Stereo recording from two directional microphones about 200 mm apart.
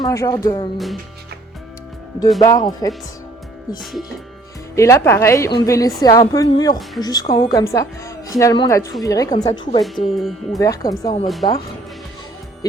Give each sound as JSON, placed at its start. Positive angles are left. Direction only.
{"t": 0.0, "sound": "a woman's voice", "side_deg": 15}
{"t": 2.4, "sound": "speech", "side_deg": 20}
{"t": 4.7, "sound": "a woman's voice", "side_deg": 15}
{"t": 10.2, "sound": "speech", "side_deg": 0}
{"t": 10.6, "sound": "a woman's voice", "side_deg": 15}